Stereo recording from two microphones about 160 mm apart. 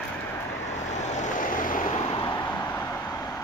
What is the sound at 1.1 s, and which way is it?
Vehicle, 55° left (ahead or behind).